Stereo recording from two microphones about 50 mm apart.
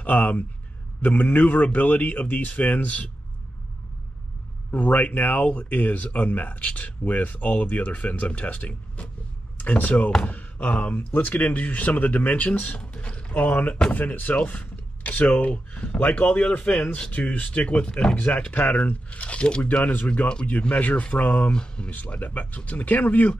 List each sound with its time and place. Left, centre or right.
0.0 s speech: left
4.6 s speech: left
9.6 s speech: left
12.7 s speech: left
16.0 s speech: left
21.5 s speech: centre
22.1 s speech: left